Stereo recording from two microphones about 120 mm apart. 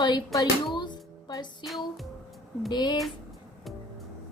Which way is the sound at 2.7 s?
40° left (ahead or behind).